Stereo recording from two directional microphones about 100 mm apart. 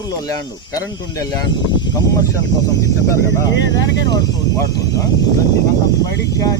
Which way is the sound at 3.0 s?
30° left (ahead or behind).